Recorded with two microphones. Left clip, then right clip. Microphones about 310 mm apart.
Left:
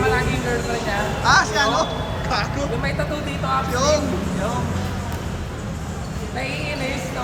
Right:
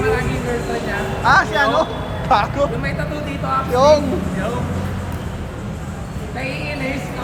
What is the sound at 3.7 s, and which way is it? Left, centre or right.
Speech, centre.